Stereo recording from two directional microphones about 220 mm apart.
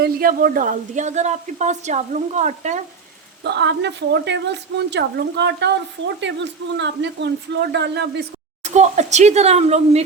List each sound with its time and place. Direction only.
0.0 s speech: 40° right (ahead or behind)
3.4 s a woman's voice: 50° right (ahead or behind)
8.6 s speech: 30° right (ahead or behind)